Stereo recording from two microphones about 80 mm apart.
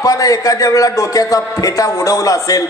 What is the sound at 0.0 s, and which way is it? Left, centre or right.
A man's voice, left.